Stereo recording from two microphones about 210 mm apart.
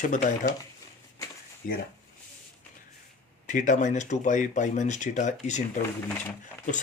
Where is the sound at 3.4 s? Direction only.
35° left (ahead or behind).